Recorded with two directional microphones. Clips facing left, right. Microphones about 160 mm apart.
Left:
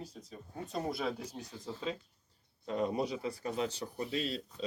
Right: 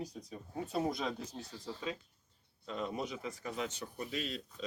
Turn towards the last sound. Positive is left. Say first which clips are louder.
# left 4 dB
turn(degrees=30)  # may be behind; listen again after turning